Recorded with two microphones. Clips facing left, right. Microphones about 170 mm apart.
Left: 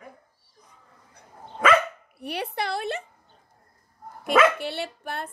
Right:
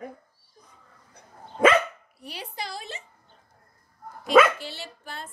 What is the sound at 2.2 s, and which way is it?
Speech, 65° left (ahead or behind).